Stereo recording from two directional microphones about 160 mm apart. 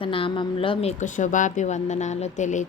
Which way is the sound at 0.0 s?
35° left (ahead or behind).